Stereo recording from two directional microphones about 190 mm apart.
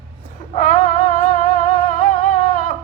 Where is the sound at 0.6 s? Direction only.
40° left (ahead or behind).